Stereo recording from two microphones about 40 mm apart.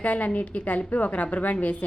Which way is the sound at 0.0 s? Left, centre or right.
Left.